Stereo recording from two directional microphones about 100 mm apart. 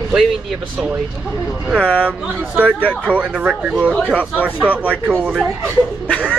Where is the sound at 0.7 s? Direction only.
10° right (ahead or behind).